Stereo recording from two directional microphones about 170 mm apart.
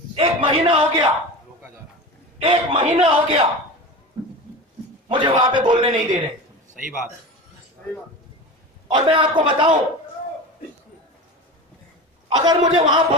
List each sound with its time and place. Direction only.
0.2 s a man's voice: 30° right (ahead or behind)
2.4 s a man's voice: 35° right (ahead or behind)
5.0 s a man's voice: 30° right (ahead or behind)
8.8 s a man's voice: 30° right (ahead or behind)
12.4 s a man's voice: 25° right (ahead or behind)